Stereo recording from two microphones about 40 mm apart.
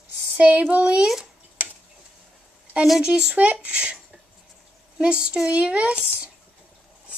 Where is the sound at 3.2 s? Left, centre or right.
Right.